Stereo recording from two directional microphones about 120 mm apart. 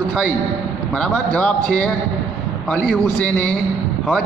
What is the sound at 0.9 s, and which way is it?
A man's voice, 10° left (ahead or behind).